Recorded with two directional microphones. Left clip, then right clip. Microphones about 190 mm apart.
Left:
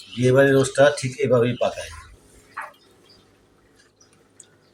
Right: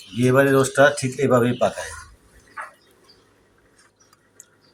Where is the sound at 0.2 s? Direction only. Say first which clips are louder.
Even; 5° right (ahead or behind).